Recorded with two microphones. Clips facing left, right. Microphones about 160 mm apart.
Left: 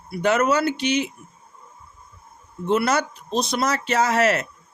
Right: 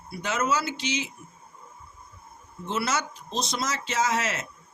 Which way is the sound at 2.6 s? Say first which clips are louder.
Left 8 dB; 55° left (ahead or behind).